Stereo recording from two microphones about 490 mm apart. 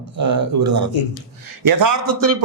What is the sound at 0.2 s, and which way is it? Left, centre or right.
A man's voice, right.